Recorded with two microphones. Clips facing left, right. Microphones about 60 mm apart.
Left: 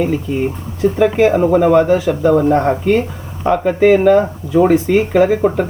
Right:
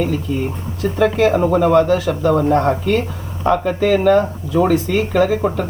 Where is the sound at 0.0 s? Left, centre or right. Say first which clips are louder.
Left 3 dB; left.